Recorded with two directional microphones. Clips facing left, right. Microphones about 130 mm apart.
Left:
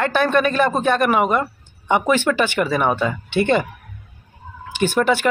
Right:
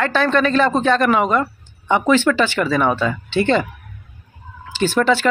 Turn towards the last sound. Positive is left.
turn(degrees=15)  # may be behind; listen again after turning